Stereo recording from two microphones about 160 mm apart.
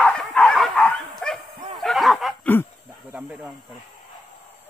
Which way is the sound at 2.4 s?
15° left (ahead or behind).